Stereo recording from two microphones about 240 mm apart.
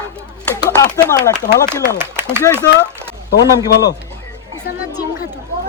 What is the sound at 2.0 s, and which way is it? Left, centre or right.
Speech, centre.